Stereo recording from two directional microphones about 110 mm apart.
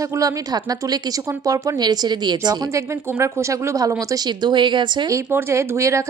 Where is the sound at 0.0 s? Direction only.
30° right (ahead or behind).